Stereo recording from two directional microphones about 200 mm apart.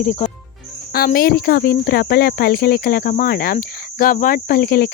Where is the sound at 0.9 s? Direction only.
45° left (ahead or behind).